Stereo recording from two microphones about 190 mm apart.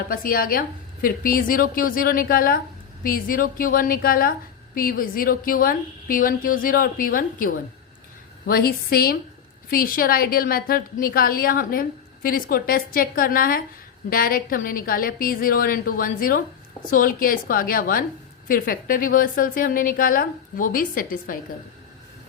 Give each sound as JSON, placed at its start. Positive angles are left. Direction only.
{"t": 0.1, "sound": "a woman's voice", "side_deg": 50}